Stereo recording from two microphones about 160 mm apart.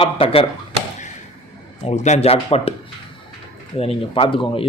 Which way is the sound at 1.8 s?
45° left (ahead or behind).